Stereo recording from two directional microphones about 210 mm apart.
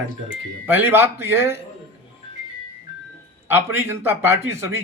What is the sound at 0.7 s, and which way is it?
Speech, 10° right (ahead or behind).